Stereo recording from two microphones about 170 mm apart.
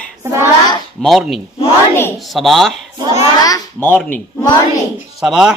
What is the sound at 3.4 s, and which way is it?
Speech, 20° left (ahead or behind).